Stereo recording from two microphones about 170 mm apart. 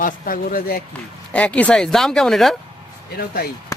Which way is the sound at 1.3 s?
10° left (ahead or behind).